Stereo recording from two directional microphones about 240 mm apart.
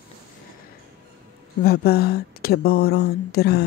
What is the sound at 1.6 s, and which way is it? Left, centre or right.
Speech, left.